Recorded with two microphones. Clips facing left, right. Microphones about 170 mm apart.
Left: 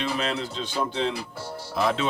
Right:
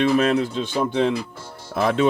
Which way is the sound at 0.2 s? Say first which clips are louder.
Right 9 dB; 50° right (ahead or behind).